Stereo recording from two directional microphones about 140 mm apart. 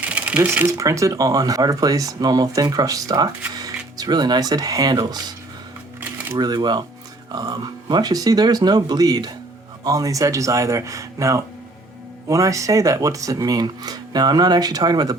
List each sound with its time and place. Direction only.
0.0 s speech: 10° right (ahead or behind); by 5.2 s 30° right (ahead or behind)
6.0 s camera: 15° right (ahead or behind)
6.3 s speech: 30° right (ahead or behind)